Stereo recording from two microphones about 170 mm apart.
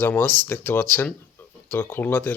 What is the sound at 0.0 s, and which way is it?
Speech, 10° left (ahead or behind).